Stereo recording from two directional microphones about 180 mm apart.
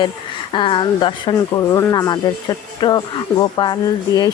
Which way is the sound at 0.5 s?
25° left (ahead or behind).